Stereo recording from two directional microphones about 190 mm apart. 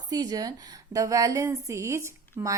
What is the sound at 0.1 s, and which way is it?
A woman's voice, 20° right (ahead or behind).